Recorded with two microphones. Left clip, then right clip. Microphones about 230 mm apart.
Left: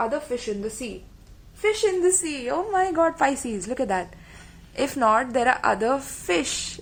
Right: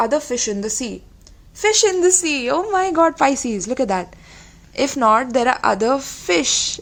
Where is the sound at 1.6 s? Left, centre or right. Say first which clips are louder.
Right 6 dB; right.